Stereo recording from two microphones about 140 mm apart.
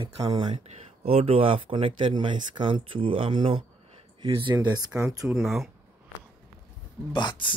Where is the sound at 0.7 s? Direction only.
45° right (ahead or behind); by 4.8 s 30° right (ahead or behind).